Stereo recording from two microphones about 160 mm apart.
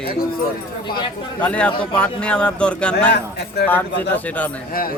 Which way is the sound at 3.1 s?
90° left.